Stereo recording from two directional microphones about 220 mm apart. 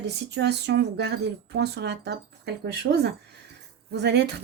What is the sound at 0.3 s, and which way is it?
A woman's voice, 50° right (ahead or behind).